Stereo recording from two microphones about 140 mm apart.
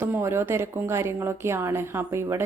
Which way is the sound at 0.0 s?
15° right (ahead or behind).